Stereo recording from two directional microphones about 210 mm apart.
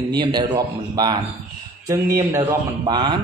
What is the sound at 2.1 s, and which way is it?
Speech, 15° right (ahead or behind).